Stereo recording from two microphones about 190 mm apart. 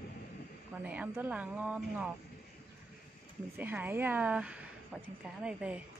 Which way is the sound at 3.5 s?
10° right (ahead or behind).